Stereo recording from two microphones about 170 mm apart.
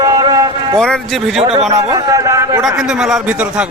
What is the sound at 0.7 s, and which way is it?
Speech, 5° left (ahead or behind).